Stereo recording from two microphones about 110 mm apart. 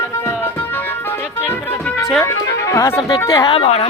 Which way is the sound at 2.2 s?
30° left (ahead or behind).